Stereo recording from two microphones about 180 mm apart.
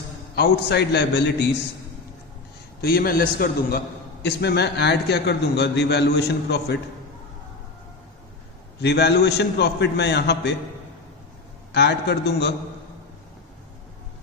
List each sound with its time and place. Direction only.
0.3 s a man's voice: 70° left (ahead or behind)
2.8 s a man's voice: 60° left (ahead or behind)
4.2 s a man's voice: 65° left (ahead or behind)
8.8 s a man's voice: 70° left (ahead or behind)
11.7 s a man's voice: 65° left (ahead or behind)